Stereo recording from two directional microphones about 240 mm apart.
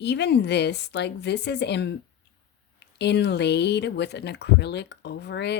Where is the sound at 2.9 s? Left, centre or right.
Left.